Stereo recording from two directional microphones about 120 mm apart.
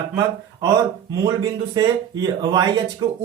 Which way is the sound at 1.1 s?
35° right (ahead or behind).